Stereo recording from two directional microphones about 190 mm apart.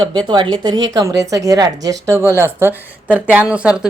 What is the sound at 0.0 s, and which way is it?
Speech, 25° right (ahead or behind).